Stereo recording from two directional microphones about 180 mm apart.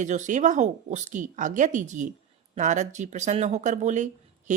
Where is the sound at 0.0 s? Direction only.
45° right (ahead or behind).